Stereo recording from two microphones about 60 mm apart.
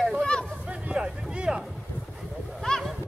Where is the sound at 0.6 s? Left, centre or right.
Centre.